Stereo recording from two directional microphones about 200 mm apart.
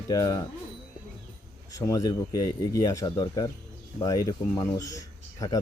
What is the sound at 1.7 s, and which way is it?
Speech, 15° left (ahead or behind).